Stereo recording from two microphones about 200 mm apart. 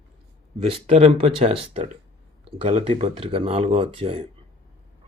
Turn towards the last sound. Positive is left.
turn(degrees=-30)  # may be behind; listen again after turning